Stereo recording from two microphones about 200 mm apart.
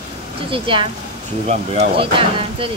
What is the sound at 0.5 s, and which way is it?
Speech, 25° right (ahead or behind).